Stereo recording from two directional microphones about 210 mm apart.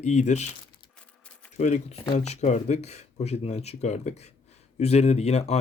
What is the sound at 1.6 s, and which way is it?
Speech, 35° left (ahead or behind).